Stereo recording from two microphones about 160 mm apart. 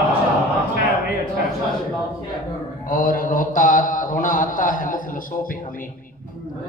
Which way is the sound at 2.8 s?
65° left (ahead or behind).